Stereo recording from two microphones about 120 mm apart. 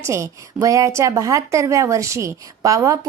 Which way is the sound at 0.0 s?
25° right (ahead or behind).